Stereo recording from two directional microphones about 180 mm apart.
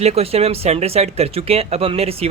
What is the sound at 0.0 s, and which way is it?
Speech, 35° right (ahead or behind).